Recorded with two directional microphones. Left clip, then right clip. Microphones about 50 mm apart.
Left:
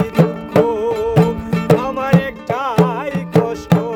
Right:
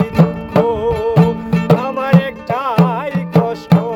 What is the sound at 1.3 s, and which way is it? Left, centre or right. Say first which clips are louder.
Music: even; centre.